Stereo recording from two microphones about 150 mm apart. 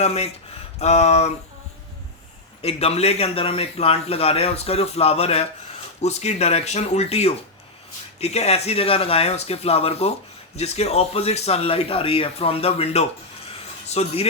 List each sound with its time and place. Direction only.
0.0 s speech: 45° left (ahead or behind)
2.6 s speech: 40° left (ahead or behind)
13.5 s a sound: 45° left (ahead or behind)